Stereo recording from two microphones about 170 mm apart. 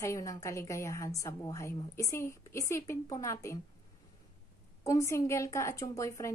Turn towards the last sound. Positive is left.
turn(degrees=20)  # may be behind; listen again after turning